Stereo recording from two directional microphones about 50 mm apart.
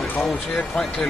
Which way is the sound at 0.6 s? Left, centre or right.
Centre.